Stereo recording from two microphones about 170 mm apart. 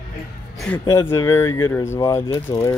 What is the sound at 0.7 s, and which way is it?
Speech, 5° left (ahead or behind).